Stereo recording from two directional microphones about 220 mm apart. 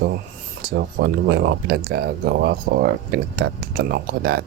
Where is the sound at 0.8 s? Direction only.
45° right (ahead or behind).